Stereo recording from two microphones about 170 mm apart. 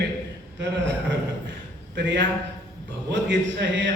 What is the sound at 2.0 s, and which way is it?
A man's voice, 90° right.